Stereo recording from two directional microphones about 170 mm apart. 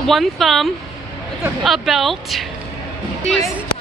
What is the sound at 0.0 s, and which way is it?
A woman's voice, centre (ahead or behind).